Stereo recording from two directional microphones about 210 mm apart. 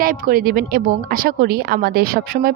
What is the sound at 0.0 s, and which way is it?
A woman's voice, 40° right (ahead or behind).